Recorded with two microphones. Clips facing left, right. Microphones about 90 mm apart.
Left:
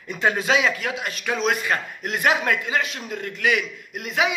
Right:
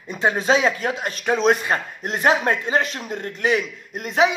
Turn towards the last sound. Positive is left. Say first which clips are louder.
# right 5 dB
turn(degrees=-35)  # may be behind; listen again after turning